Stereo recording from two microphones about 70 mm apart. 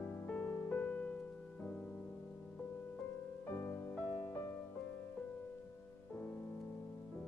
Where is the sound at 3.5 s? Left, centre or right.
Left.